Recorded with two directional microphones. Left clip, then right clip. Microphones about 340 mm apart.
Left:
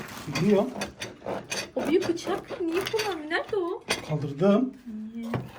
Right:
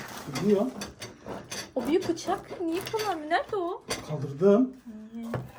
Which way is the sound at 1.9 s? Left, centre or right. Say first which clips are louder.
Left 1 dB; right.